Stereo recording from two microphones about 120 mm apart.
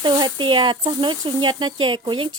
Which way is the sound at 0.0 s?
40° right (ahead or behind).